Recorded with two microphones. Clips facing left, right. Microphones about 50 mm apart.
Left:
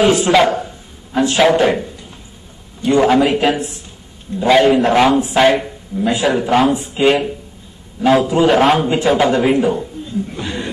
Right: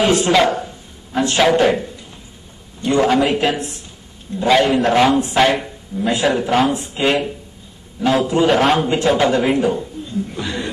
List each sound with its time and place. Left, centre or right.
0.0 s a man's voice: centre
3.0 s a man's voice: centre
10.4 s speech: left